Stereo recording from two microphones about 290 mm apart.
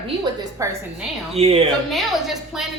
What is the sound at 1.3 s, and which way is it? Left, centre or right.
Speech, right.